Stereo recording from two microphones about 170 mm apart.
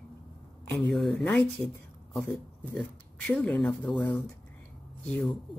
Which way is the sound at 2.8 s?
5° left (ahead or behind).